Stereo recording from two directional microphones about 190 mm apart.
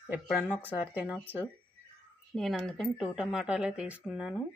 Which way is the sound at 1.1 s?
10° right (ahead or behind).